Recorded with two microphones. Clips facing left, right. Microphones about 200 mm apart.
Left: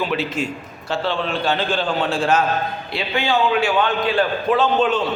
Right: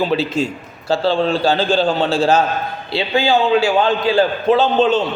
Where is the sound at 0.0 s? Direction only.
30° right (ahead or behind).